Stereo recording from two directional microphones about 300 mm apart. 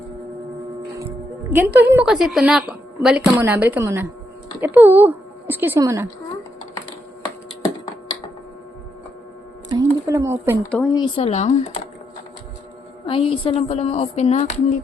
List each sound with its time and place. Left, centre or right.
0.9 s music: centre
1.9 s a woman's voice: centre
9.6 s speech: centre
10.7 s a woman's voice: centre
11.0 s speech: left
13.1 s speech: centre